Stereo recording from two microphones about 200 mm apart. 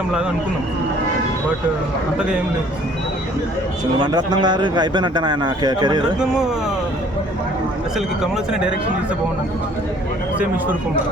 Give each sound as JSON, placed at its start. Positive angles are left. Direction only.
{"t": 4.0, "sound": "a man's voice", "side_deg": -20}
{"t": 6.1, "sound": "speech", "side_deg": -5}
{"t": 7.9, "sound": "speech", "side_deg": -5}